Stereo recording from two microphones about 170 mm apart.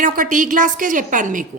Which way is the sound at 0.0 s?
50° right (ahead or behind).